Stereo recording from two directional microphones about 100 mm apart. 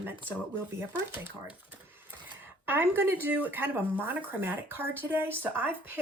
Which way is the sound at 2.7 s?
20° right (ahead or behind).